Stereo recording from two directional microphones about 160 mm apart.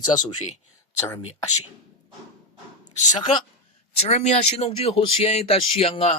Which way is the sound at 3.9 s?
45° left (ahead or behind).